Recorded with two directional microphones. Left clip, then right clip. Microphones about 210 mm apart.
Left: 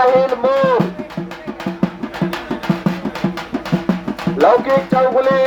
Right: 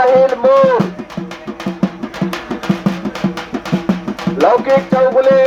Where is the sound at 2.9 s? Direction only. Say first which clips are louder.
Right 1 dB; 30° right (ahead or behind).